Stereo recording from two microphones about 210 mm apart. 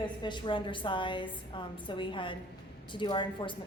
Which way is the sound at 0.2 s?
20° left (ahead or behind).